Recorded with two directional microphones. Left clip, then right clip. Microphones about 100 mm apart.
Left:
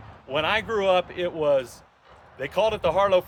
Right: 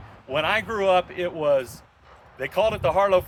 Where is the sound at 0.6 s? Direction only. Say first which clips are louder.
Right 1 dB; 55° left (ahead or behind).